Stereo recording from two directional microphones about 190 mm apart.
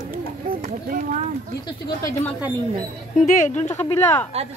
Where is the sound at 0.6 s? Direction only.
45° right (ahead or behind).